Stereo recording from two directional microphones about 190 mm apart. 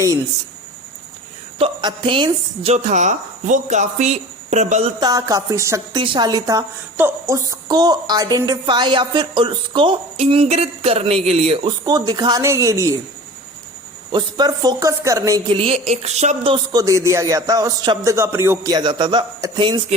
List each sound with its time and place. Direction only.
1.5 s a woman's voice: 25° right (ahead or behind)
4.9 s a woman's voice: 20° right (ahead or behind)
14.1 s a woman's voice: 20° right (ahead or behind)
15.4 s a woman's voice: 30° right (ahead or behind)
16.8 s a man's voice: 15° right (ahead or behind)